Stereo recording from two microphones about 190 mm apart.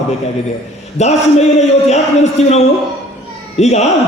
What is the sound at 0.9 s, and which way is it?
A man's voice, 35° left (ahead or behind).